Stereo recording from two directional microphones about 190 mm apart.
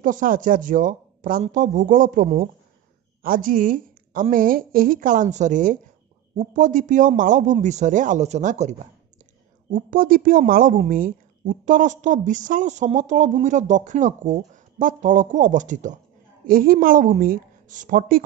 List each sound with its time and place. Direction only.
0.0 s a woman's voice: 45° right (ahead or behind)